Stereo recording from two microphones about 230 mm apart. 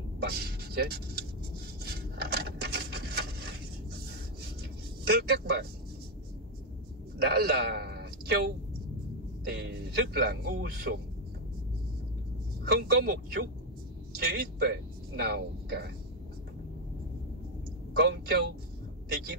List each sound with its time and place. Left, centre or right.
0.2 s speech: right
1.9 s a sound: right
5.0 s a man's voice: right
7.2 s a man's voice: right
9.5 s a man's voice: right
12.6 s a man's voice: right
17.9 s a man's voice: right